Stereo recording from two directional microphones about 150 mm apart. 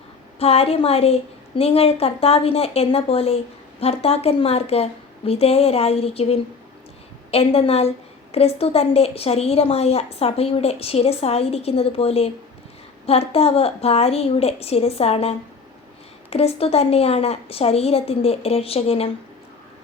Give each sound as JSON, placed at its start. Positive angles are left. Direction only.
{"t": 0.3, "sound": "a woman's voice", "side_deg": 40}